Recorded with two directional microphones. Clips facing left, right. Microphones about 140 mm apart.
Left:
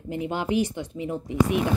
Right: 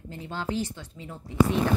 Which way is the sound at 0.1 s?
15° left (ahead or behind).